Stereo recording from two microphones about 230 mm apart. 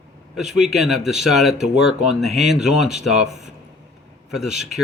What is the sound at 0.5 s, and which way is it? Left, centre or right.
Speech, centre.